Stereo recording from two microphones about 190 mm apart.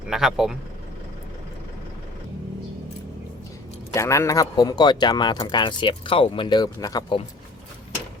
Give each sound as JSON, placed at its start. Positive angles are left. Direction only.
{"t": 0.1, "sound": "speech", "side_deg": 0}
{"t": 3.9, "sound": "speech", "side_deg": 15}